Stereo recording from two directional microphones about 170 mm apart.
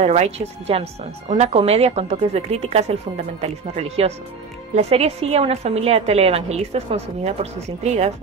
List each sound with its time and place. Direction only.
0.0 s a woman's voice: 40° right (ahead or behind)